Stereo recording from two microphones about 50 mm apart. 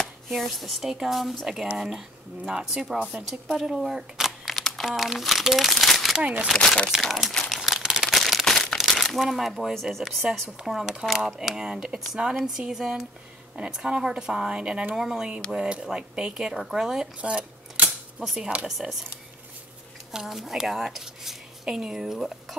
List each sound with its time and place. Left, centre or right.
0.3 s speech: centre
6.1 s speech: right
6.5 s speech: centre
6.9 s speech: centre
7.4 s crumpling: centre
8.2 s a sound: centre
8.8 s speech: centre
10.2 s a woman's voice: centre
15.0 s speech: centre
17.2 s a sound: right
18.2 s speech: centre
20.1 s speech: centre